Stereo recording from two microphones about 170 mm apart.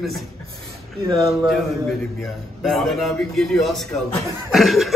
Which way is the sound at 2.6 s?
Centre (ahead or behind).